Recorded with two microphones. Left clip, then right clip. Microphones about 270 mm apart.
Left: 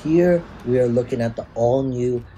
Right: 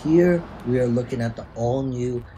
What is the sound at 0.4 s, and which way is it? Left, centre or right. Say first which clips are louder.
Speech: left 4 dB; right.